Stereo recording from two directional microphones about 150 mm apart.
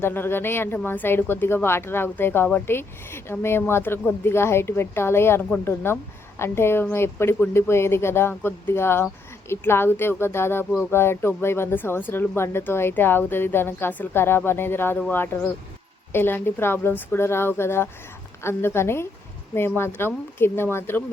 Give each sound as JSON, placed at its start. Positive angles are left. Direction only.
{"t": 0.0, "sound": "speech", "side_deg": 15}